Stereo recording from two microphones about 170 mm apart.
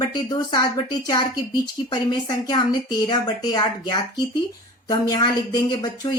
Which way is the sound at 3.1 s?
20° left (ahead or behind).